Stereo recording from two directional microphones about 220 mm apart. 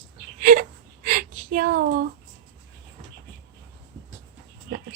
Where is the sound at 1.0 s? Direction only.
40° right (ahead or behind).